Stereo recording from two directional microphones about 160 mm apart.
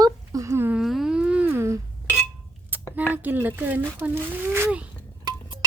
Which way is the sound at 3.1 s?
10° right (ahead or behind).